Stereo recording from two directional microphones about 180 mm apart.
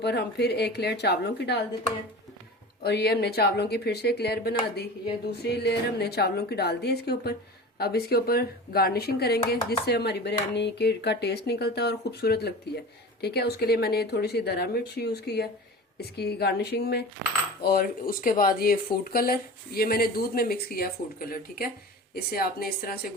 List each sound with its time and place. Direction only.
0.0 s a woman's voice: 65° left (ahead or behind)
2.8 s speech: 60° left (ahead or behind)